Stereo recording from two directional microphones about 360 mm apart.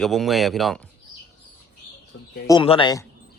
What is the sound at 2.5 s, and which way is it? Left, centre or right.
Speech, centre.